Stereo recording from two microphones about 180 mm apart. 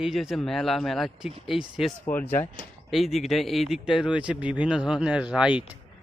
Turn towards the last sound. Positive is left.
turn(degrees=-5)  # may be behind; listen again after turning